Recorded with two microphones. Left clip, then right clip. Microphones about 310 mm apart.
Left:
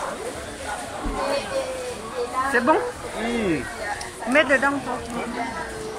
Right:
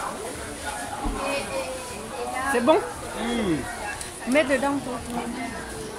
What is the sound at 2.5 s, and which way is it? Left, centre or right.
Speech, centre.